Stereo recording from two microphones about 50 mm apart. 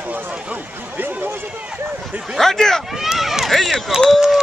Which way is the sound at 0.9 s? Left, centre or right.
Right.